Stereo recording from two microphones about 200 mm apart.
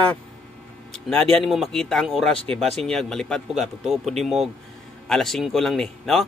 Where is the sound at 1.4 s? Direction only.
Centre (ahead or behind).